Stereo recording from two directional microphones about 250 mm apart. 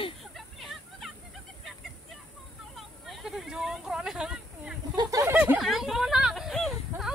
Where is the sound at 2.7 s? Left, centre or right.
Centre.